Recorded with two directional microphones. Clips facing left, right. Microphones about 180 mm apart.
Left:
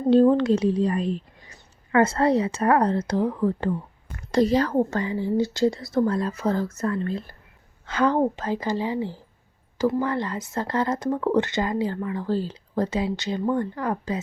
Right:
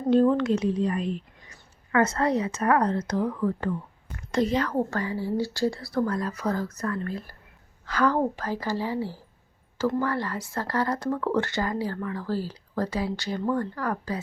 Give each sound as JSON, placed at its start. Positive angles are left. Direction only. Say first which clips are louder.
{"t": 0.1, "sound": "speech", "louder": "left 3 dB", "side_deg": 30}
{"t": 4.7, "sound": "speech", "louder": "left 4 dB", "side_deg": 20}